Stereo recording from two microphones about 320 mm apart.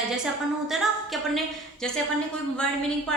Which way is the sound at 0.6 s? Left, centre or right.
Centre.